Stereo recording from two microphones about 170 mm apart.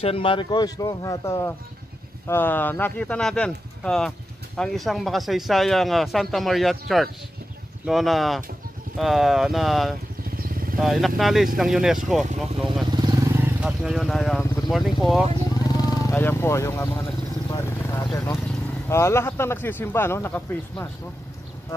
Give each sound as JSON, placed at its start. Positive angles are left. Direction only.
{"t": 0.0, "sound": "speech", "side_deg": 30}
{"t": 10.3, "sound": "vehicle", "side_deg": -60}
{"t": 10.8, "sound": "speech", "side_deg": 0}
{"t": 12.9, "sound": "vehicle", "side_deg": -25}
{"t": 13.3, "sound": "speech", "side_deg": -10}
{"t": 15.6, "sound": "vehicle", "side_deg": 20}
{"t": 18.1, "sound": "speech", "side_deg": 15}